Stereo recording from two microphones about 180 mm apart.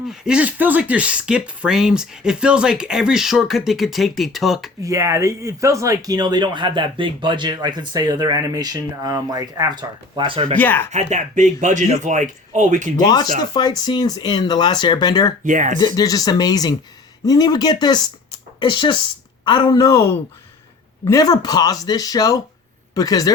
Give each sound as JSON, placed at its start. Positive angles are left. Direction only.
{"t": 0.1, "sound": "speech", "side_deg": -5}
{"t": 4.8, "sound": "speech", "side_deg": -15}
{"t": 10.6, "sound": "speech", "side_deg": 10}
{"t": 10.9, "sound": "speech", "side_deg": -40}
{"t": 13.0, "sound": "speech", "side_deg": 25}
{"t": 15.4, "sound": "speech", "side_deg": -45}
{"t": 16.0, "sound": "speech", "side_deg": 20}